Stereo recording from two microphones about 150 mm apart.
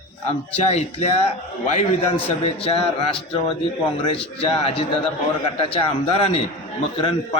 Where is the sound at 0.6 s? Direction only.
45° left (ahead or behind).